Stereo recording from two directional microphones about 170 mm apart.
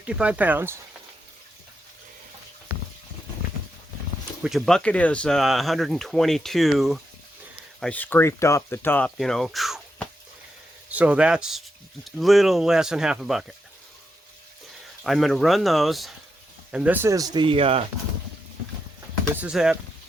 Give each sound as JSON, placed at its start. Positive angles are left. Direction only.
{"t": 0.0, "sound": "speech", "side_deg": -5}
{"t": 4.4, "sound": "speech", "side_deg": 0}
{"t": 15.0, "sound": "speech", "side_deg": 0}
{"t": 19.4, "sound": "speech", "side_deg": -5}